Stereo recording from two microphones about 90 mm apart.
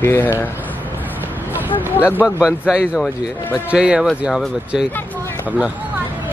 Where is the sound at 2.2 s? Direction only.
10° right (ahead or behind).